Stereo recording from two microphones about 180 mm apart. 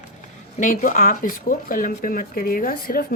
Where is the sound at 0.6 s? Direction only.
45° left (ahead or behind).